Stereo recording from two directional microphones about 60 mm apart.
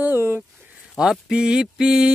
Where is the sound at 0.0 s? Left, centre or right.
Right.